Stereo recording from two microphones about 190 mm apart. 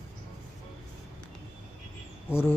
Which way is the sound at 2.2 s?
10° left (ahead or behind).